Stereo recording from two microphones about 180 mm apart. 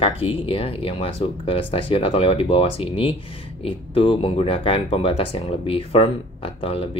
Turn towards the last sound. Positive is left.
turn(degrees=30)  # may be behind; listen again after turning